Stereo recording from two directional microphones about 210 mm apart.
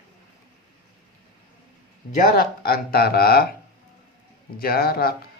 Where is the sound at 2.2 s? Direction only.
45° left (ahead or behind).